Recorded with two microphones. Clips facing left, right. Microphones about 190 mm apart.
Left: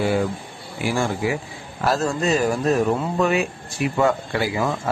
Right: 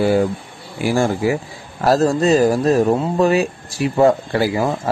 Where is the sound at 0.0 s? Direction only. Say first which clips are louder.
Right 5 dB; 40° right (ahead or behind).